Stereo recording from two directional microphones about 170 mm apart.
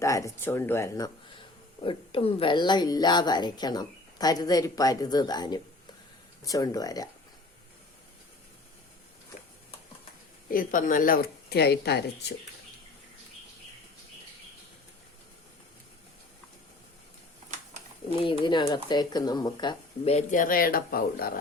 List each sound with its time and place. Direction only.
0.0 s speech: 15° left (ahead or behind)
1.8 s a woman's voice: 30° left (ahead or behind)
10.5 s speech: 55° left (ahead or behind); by 12.0 s 75° left (ahead or behind)
18.2 s a woman's voice: 30° left (ahead or behind)
20.1 s speech: 45° left (ahead or behind); by 21.3 s 60° left (ahead or behind)